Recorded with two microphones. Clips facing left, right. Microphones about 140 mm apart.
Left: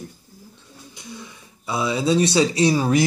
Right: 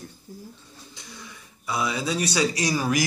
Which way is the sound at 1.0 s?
20° left (ahead or behind).